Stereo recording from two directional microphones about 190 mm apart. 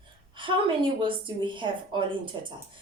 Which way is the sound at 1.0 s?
25° right (ahead or behind).